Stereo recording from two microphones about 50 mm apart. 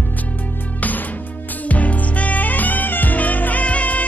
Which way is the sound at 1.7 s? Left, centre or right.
Left.